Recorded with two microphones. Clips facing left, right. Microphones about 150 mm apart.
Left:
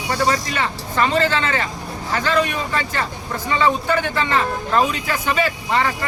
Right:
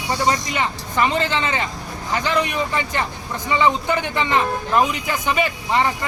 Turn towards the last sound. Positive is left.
turn(degrees=-15)  # may be behind; listen again after turning